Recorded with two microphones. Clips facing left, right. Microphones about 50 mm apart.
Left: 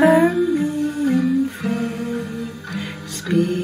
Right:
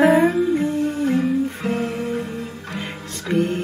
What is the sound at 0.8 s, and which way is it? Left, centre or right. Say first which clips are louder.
Music: left 1 dB; right.